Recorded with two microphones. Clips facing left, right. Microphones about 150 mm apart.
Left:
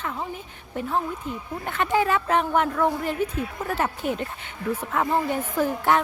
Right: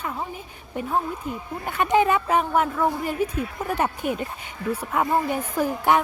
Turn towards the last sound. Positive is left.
turn(degrees=-10)  # may be behind; listen again after turning